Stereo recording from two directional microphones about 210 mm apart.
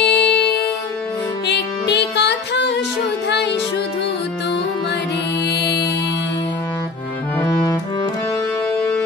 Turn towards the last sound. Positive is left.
turn(degrees=15)  # may be behind; listen again after turning